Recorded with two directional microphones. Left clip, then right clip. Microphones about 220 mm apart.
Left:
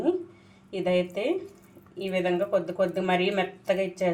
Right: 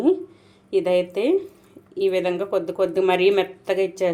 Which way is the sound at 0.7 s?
45° right (ahead or behind).